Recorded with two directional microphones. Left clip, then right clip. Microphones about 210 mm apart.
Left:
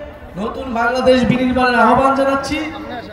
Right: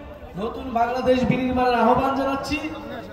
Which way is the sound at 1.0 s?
50° left (ahead or behind).